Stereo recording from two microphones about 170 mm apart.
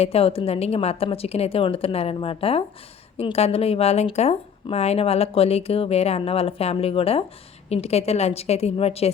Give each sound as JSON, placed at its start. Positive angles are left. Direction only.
{"t": 0.0, "sound": "speech", "side_deg": 35}